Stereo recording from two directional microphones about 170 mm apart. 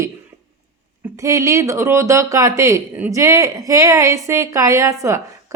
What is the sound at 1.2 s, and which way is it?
A woman's voice, 20° right (ahead or behind).